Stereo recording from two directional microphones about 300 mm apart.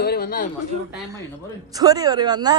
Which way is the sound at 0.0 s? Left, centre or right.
Left.